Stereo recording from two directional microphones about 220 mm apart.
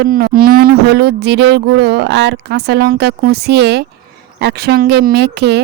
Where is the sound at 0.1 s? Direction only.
45° right (ahead or behind).